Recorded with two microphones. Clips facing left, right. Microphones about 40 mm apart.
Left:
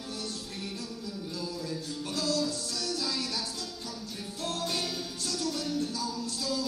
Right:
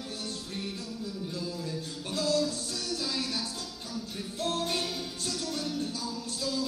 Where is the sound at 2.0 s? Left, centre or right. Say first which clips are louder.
Right 2 dB; right.